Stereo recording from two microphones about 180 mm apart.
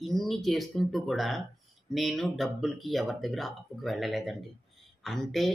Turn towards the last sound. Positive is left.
turn(degrees=0)  # may be behind; listen again after turning